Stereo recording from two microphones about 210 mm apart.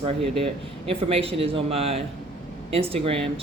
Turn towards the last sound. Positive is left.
turn(degrees=-25)  # may be behind; listen again after turning